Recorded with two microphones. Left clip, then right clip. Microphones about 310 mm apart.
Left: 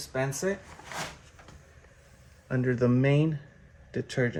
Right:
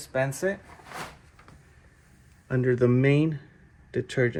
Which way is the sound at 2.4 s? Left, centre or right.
Right.